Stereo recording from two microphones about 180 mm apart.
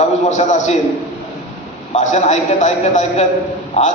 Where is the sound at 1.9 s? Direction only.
40° left (ahead or behind).